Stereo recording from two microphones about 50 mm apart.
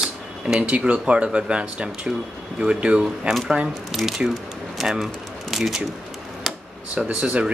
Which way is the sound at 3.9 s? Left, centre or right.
Centre.